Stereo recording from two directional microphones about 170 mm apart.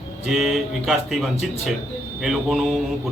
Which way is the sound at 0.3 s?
Centre (ahead or behind).